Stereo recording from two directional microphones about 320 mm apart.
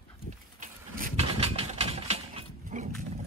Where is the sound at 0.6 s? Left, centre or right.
Right.